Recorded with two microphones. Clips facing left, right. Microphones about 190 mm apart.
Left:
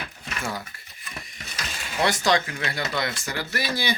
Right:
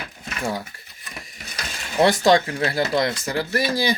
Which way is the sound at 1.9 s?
35° right (ahead or behind).